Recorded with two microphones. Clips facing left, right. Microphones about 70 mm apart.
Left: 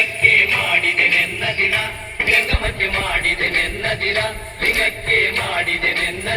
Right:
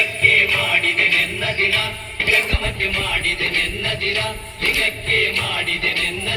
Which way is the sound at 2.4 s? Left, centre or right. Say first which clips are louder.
Left 2 dB; left.